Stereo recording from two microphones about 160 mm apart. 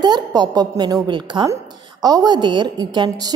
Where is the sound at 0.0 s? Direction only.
25° right (ahead or behind).